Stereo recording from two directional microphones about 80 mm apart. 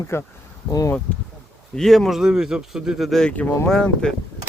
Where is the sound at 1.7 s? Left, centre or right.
Centre.